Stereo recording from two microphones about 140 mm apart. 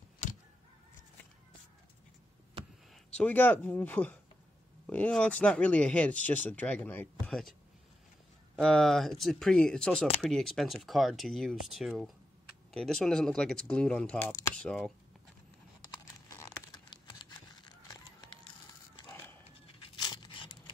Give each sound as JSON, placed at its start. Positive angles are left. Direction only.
{"t": 2.9, "sound": "speech", "side_deg": 5}
{"t": 8.5, "sound": "speech", "side_deg": 5}
{"t": 16.3, "sound": "a sound", "side_deg": 20}
{"t": 16.7, "sound": "a sound", "side_deg": 30}
{"t": 19.0, "sound": "dog", "side_deg": 15}
{"t": 20.0, "sound": "tearing", "side_deg": 30}